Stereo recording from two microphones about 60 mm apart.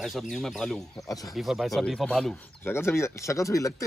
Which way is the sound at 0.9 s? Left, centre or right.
Left.